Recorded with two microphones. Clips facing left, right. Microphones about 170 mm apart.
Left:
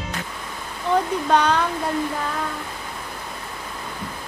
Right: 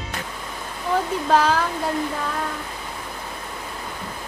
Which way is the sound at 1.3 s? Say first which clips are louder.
Even; 5° right (ahead or behind).